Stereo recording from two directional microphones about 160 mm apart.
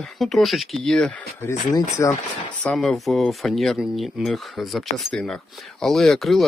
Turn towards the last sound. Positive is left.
turn(degrees=0)  # may be behind; listen again after turning